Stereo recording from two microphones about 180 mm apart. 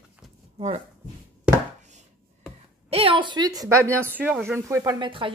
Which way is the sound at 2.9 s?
30° right (ahead or behind).